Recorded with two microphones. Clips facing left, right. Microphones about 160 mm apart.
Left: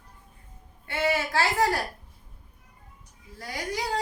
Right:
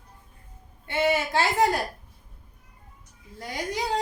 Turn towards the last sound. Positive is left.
turn(degrees=-20)  # may be behind; listen again after turning